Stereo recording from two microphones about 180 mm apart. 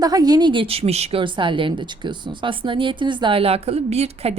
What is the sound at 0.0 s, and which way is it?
A woman's voice, 20° right (ahead or behind).